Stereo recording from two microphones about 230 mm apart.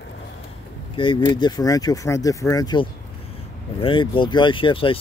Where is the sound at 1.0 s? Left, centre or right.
Left.